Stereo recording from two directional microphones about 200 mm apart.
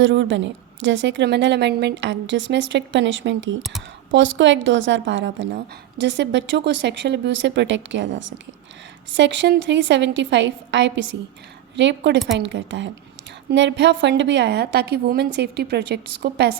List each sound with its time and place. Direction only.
0.0 s a woman's voice: 70° right (ahead or behind)
3.6 s speech: centre (ahead or behind)
4.1 s a woman's voice: 65° right (ahead or behind)